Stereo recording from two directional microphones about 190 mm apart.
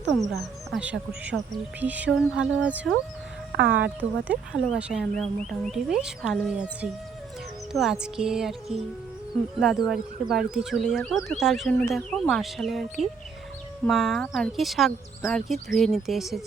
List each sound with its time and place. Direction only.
0.7 s speech: 5° right (ahead or behind)
3.6 s speech: 60° right (ahead or behind)
4.3 s speech: 5° right (ahead or behind)
7.7 s music: centre (ahead or behind)
8.0 s speech: 5° right (ahead or behind)